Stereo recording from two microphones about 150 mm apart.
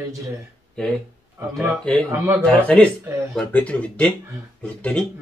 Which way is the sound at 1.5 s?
5° left (ahead or behind).